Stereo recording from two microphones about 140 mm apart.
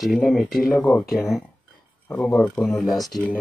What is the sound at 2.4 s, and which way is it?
Speech, 5° left (ahead or behind).